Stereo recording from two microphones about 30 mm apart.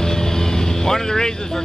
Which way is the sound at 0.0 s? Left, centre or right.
Centre.